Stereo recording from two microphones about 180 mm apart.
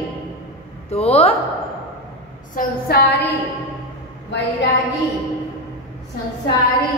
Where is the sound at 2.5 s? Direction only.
60° left (ahead or behind).